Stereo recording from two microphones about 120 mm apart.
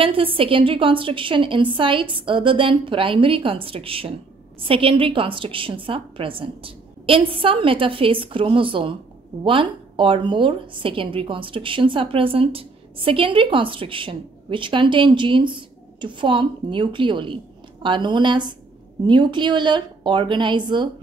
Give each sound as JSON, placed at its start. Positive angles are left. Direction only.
{"t": 0.0, "sound": "a woman's voice", "side_deg": -50}